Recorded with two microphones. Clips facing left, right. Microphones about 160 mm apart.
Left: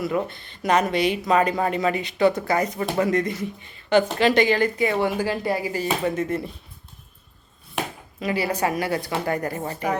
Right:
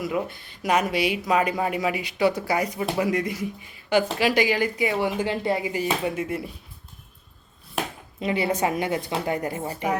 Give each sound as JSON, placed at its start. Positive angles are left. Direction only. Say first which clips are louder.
{"t": 0.0, "sound": "speech", "louder": "left 2 dB", "side_deg": -10}
{"t": 8.2, "sound": "speech", "louder": "even", "side_deg": -25}